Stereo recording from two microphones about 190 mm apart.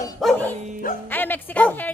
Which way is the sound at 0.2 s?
5° left (ahead or behind).